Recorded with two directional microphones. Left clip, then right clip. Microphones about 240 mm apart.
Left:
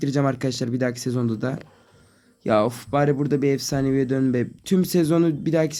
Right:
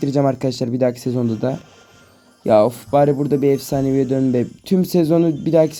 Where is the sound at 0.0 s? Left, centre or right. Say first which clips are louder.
Right 5 dB; centre.